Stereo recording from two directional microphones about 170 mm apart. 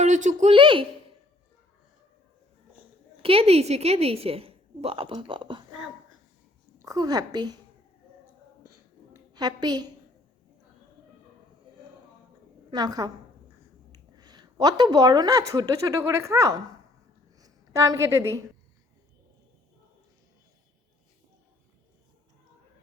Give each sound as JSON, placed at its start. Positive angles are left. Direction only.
{"t": 0.0, "sound": "speech", "side_deg": -45}
{"t": 0.5, "sound": "speech", "side_deg": -30}
{"t": 3.2, "sound": "a woman's voice", "side_deg": -35}
{"t": 6.7, "sound": "a woman's voice", "side_deg": -20}
{"t": 9.3, "sound": "a woman's voice", "side_deg": -25}
{"t": 12.7, "sound": "speech", "side_deg": -25}
{"t": 17.3, "sound": "a sound", "side_deg": -20}